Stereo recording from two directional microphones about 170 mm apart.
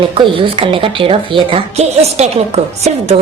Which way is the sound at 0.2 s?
30° right (ahead or behind).